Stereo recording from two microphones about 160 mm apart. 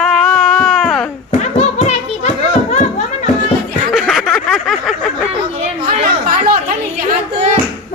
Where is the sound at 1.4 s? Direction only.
45° left (ahead or behind).